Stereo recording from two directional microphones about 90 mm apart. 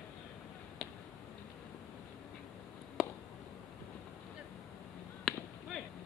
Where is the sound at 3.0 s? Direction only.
Centre (ahead or behind).